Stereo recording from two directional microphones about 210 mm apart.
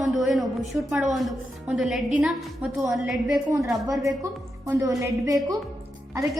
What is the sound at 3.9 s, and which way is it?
A woman's voice, 15° right (ahead or behind).